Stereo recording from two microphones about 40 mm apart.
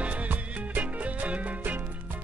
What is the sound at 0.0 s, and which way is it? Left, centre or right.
Music, right.